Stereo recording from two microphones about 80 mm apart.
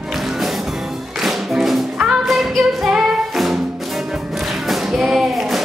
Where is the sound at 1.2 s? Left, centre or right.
Centre.